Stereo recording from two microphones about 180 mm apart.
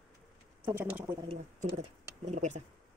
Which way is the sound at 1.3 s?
35° right (ahead or behind).